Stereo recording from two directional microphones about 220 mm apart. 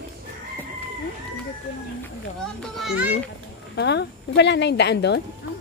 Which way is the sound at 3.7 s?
50° left (ahead or behind).